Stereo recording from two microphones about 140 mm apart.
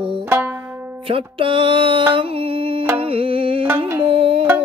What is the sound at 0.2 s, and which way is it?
Banjo, 15° right (ahead or behind).